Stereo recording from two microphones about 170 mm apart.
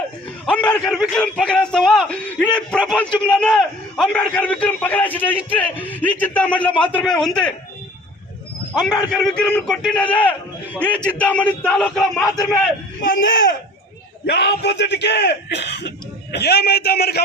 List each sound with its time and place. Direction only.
0.4 s a man's voice: 5° left (ahead or behind)
8.7 s a man's voice: 20° left (ahead or behind)
9.1 s a man's voice: 5° left (ahead or behind)
13.0 s speech: 50° left (ahead or behind)
14.3 s a man's voice: 90° left; by 17.2 s 70° left (ahead or behind)